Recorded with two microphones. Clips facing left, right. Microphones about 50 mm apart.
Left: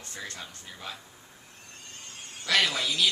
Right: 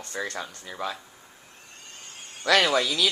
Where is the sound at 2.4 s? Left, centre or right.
Right.